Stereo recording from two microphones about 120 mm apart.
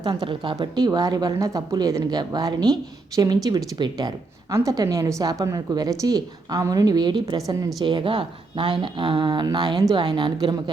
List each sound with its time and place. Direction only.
0.0 s a woman's voice: 40° right (ahead or behind)
0.5 s a woman's voice: 30° right (ahead or behind)
7.8 s a woman's voice: 40° right (ahead or behind)